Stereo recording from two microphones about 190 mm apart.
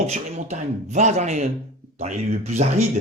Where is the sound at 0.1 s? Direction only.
40° right (ahead or behind).